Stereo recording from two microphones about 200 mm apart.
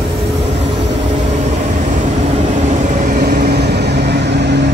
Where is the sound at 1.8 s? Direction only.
35° right (ahead or behind).